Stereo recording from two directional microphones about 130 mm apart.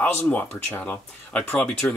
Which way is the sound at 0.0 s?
15° left (ahead or behind).